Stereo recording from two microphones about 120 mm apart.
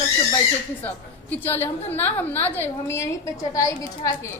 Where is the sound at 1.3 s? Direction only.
15° left (ahead or behind).